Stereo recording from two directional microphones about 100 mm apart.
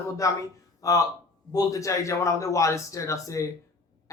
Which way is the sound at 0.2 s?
35° left (ahead or behind).